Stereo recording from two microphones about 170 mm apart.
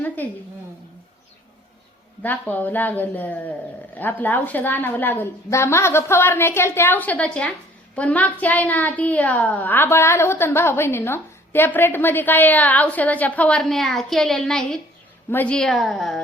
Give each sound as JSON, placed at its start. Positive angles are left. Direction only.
{"t": 0.2, "sound": "a child's voice", "side_deg": 10}
{"t": 2.2, "sound": "a child's voice", "side_deg": 10}